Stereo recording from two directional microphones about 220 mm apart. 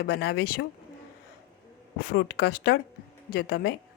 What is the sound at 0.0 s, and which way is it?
Speech, 45° left (ahead or behind).